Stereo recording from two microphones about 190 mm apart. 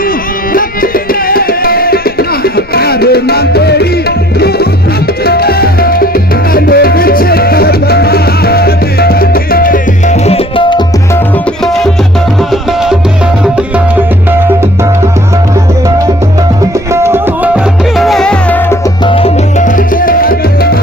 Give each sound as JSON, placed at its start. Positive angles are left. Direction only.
{"t": 1.3, "sound": "music", "side_deg": 50}
{"t": 5.2, "sound": "music", "side_deg": 55}
{"t": 16.9, "sound": "music", "side_deg": -15}
{"t": 17.9, "sound": "music", "side_deg": 0}
{"t": 19.0, "sound": "music", "side_deg": 30}
{"t": 19.6, "sound": "music", "side_deg": 45}